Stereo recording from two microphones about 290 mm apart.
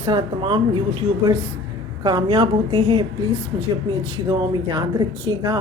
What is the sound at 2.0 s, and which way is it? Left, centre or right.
Speech, centre.